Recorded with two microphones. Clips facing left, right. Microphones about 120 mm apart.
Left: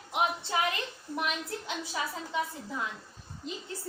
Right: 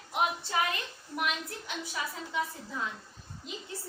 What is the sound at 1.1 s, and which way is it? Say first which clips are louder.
A woman's voice: even; 25° left (ahead or behind).